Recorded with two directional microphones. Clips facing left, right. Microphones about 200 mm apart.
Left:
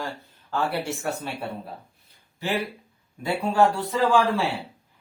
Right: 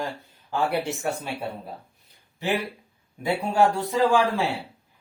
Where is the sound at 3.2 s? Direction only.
15° right (ahead or behind).